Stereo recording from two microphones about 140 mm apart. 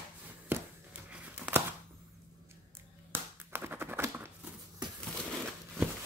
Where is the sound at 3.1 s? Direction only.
15° right (ahead or behind).